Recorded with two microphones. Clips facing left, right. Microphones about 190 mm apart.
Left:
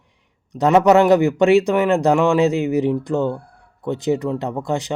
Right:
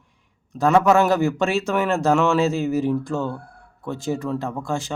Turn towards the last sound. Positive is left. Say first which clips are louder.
# left 4 dB
turn(degrees=20)  # may be behind; listen again after turning